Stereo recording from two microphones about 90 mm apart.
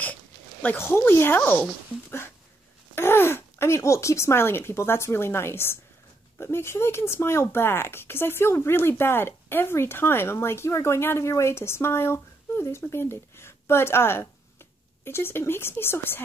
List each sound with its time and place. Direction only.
0.0 s speech: 20° left (ahead or behind)